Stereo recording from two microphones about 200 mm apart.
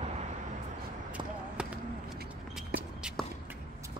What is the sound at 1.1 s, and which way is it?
Basketball bounce, 5° right (ahead or behind).